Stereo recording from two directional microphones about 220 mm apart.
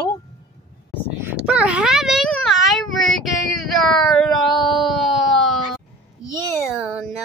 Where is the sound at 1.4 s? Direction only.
5° right (ahead or behind).